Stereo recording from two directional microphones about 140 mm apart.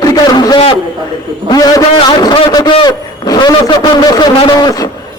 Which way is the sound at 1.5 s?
30° left (ahead or behind).